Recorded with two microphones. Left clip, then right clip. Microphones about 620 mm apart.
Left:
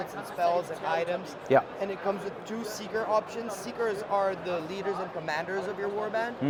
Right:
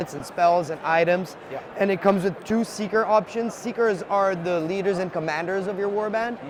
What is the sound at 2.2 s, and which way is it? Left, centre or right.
Speech, right.